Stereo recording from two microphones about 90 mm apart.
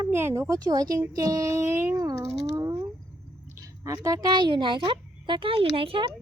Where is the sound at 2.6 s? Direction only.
35° right (ahead or behind).